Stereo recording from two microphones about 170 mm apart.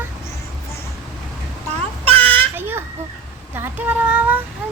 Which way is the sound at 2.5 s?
10° right (ahead or behind).